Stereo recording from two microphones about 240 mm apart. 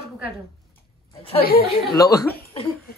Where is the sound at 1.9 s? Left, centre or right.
Centre.